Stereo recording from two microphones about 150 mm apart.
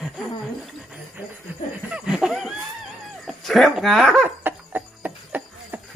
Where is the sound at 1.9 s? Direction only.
5° right (ahead or behind).